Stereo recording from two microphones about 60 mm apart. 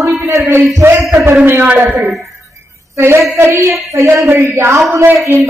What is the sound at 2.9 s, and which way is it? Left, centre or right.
A man's voice, right.